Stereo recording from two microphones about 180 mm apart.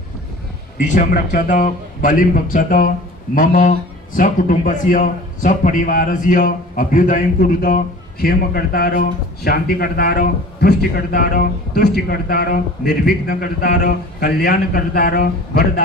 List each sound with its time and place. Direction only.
0.8 s a man's voice: 45° left (ahead or behind)